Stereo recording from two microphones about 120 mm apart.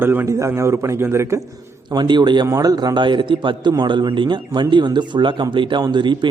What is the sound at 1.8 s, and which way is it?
A man's voice, 40° right (ahead or behind).